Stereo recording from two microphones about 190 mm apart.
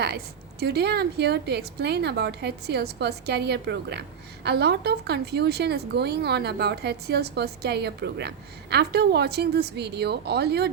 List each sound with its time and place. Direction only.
0.6 s a woman's voice: 60° right (ahead or behind)